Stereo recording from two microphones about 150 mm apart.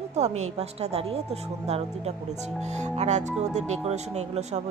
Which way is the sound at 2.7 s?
50° right (ahead or behind).